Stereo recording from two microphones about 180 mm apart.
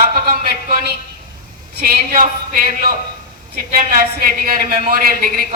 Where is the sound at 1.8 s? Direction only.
50° right (ahead or behind).